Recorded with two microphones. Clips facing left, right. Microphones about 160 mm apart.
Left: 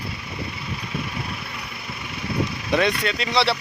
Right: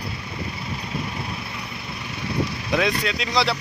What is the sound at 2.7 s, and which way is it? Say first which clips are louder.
Speech: left 2 dB; centre (ahead or behind).